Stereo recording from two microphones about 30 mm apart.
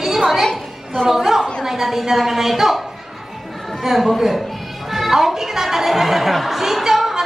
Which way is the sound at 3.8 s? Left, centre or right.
Centre.